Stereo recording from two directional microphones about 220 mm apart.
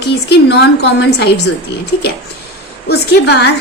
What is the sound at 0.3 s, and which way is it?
A woman's voice, 50° left (ahead or behind).